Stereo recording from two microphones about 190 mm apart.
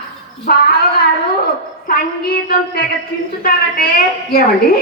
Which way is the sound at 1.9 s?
55° left (ahead or behind).